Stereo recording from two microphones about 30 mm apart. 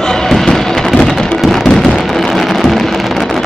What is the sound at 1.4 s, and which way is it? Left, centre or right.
Fireworks, centre.